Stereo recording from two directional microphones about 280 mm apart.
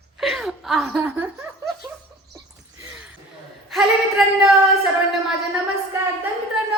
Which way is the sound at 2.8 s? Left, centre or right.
Centre.